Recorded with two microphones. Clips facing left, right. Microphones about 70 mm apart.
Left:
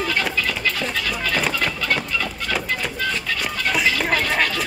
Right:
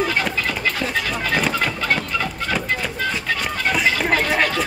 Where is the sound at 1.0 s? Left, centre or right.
Right.